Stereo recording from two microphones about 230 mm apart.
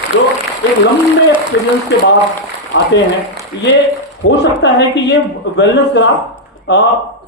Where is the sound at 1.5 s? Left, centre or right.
Left.